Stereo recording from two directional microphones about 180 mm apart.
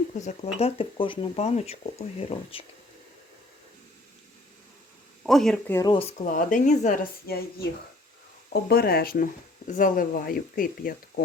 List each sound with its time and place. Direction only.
0.2 s speech: 40° left (ahead or behind)
5.2 s speech: centre (ahead or behind)
5.7 s speech: 25° left (ahead or behind)
6.3 s speech: 50° left (ahead or behind)
8.7 s speech: 60° left (ahead or behind)